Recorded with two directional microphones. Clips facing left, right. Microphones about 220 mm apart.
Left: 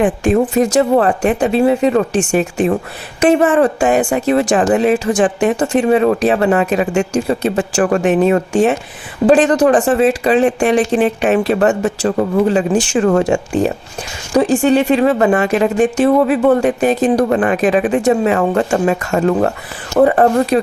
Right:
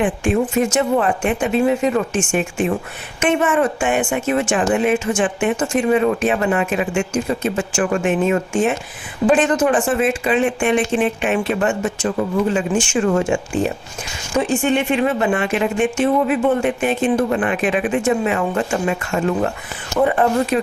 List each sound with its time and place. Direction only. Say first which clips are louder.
0.0 s speech: left 5 dB; 40° left (ahead or behind)